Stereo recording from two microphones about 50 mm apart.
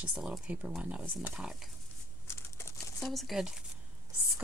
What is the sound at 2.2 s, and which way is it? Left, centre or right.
Crumpling, left.